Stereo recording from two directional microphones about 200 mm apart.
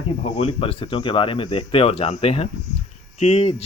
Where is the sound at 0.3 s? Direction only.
30° left (ahead or behind).